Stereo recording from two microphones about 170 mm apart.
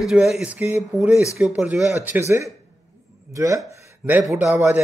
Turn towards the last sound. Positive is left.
turn(degrees=-15)  # may be behind; listen again after turning